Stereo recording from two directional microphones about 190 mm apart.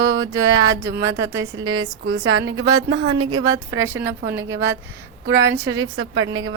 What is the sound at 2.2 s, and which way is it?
Speech, 75° right (ahead or behind).